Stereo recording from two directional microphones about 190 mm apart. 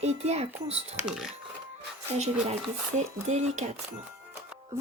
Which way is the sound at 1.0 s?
5° right (ahead or behind).